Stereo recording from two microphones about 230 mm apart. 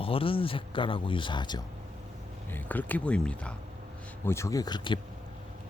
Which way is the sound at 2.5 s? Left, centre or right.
Centre.